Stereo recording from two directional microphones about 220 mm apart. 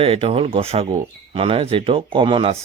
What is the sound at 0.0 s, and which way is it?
Speech, 25° right (ahead or behind).